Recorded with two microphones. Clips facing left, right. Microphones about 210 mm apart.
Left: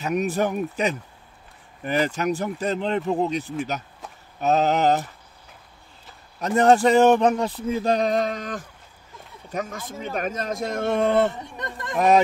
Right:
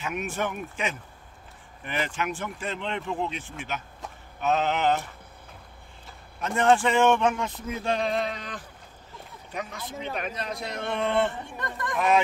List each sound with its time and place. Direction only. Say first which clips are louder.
0.0 s speech: left 7 dB; 40° left (ahead or behind)
6.4 s a man's voice: left 5 dB; 40° left (ahead or behind)
11.5 s speech: left 1 dB; 20° left (ahead or behind)